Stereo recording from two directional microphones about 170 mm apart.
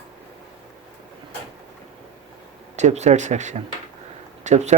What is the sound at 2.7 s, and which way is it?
Speech, 45° right (ahead or behind).